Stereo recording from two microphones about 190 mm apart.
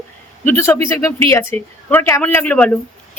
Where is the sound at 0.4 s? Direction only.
10° left (ahead or behind).